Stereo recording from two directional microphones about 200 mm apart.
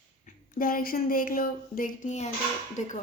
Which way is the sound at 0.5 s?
45° left (ahead or behind).